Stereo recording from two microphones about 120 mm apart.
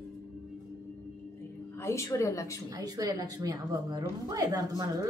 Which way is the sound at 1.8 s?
25° left (ahead or behind).